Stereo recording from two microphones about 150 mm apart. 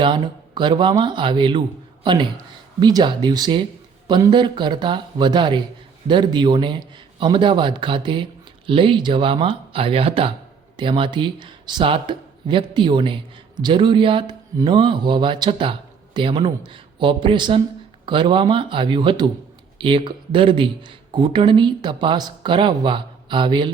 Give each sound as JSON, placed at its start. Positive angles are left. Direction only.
{"t": 0.0, "sound": "a man's voice", "side_deg": -30}